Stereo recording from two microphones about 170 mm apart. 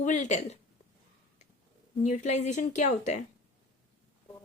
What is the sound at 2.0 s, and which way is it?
A woman's voice, 45° left (ahead or behind).